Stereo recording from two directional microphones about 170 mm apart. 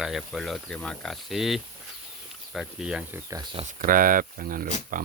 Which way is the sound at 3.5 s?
35° right (ahead or behind).